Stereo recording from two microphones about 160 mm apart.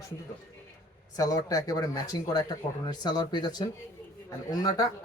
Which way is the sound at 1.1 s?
20° left (ahead or behind).